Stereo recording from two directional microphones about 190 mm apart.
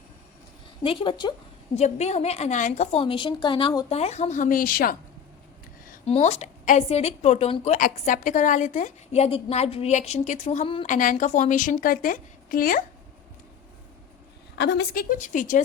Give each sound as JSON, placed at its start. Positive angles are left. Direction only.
{"t": 0.8, "sound": "a woman's voice", "side_deg": 25}
{"t": 1.7, "sound": "a woman's voice", "side_deg": 35}
{"t": 6.1, "sound": "a woman's voice", "side_deg": 35}
{"t": 10.8, "sound": "a woman's voice", "side_deg": 45}
{"t": 14.6, "sound": "a woman's voice", "side_deg": 60}